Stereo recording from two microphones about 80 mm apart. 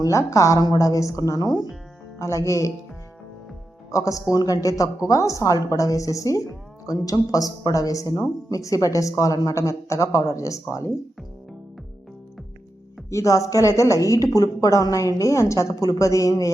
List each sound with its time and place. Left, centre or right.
0.0 s a woman's voice: left
2.1 s speech: left
3.9 s a woman's voice: left
13.1 s a woman's voice: left